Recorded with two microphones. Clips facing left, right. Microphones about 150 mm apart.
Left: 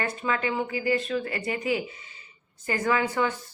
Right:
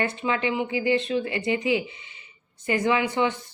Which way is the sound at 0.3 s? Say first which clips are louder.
Right 1 dB; 25° right (ahead or behind).